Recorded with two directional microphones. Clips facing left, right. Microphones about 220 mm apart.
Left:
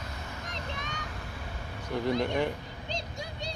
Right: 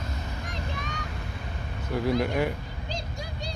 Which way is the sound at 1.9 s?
5° right (ahead or behind).